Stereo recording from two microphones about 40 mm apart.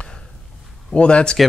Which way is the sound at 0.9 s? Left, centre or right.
Left.